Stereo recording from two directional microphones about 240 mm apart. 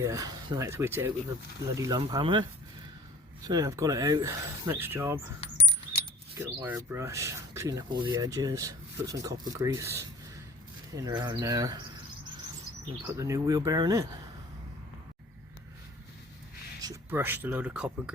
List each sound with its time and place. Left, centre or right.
0.0 s speech: centre
5.4 s keys jangling: left
6.4 s speech: centre
13.1 s speech: centre
16.8 s speech: centre